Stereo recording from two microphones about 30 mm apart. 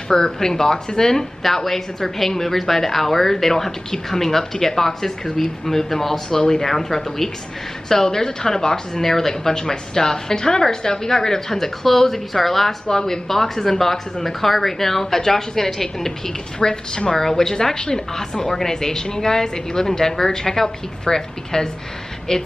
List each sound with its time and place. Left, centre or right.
0.1 s speech: left
1.4 s a woman's voice: centre
9.0 s a woman's voice: centre
9.5 s a woman's voice: left; by 12.7 s centre
12.9 s a woman's voice: centre
16.5 s speech: left
17.2 s a woman's voice: centre